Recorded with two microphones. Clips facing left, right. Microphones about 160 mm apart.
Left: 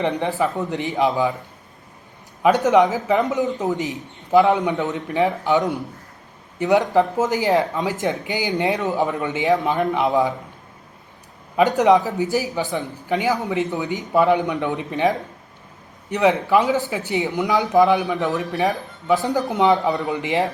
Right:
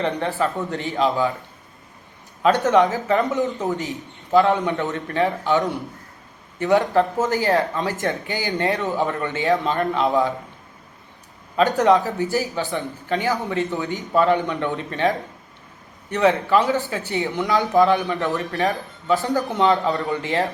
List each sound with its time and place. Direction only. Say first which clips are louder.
0.2 s a man's voice: left 1 dB; 20° left (ahead or behind)
2.4 s a man's voice: left 1 dB; 15° left (ahead or behind)
11.8 s a man's voice: left 1 dB; 20° left (ahead or behind)